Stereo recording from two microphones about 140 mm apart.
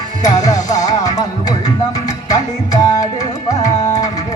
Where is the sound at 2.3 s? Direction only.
25° left (ahead or behind).